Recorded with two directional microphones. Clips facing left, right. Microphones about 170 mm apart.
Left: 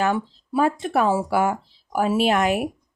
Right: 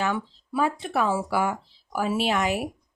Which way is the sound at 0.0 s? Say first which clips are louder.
Left 5 dB; 50° left (ahead or behind).